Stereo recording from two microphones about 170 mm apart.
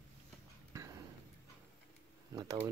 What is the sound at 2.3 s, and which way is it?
Speech, 20° right (ahead or behind).